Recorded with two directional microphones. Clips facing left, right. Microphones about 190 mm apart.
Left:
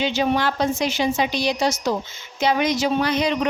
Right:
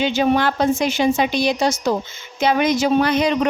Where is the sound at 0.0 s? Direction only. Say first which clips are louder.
Right 3 dB; 50° right (ahead or behind).